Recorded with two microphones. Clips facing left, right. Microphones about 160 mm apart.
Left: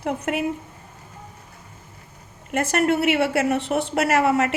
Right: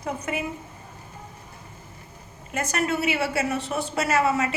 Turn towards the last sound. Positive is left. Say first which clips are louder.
# left 3 dB
turn(degrees=65)  # may be behind; listen again after turning